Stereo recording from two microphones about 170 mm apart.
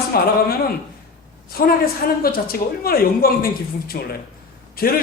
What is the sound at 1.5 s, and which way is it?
A woman's voice, 60° left (ahead or behind).